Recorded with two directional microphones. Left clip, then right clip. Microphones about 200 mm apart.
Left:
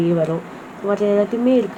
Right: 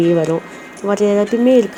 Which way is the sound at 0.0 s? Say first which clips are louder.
Right 4 dB; 45° right (ahead or behind).